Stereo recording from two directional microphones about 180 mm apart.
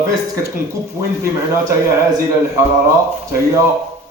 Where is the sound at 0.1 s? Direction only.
15° right (ahead or behind).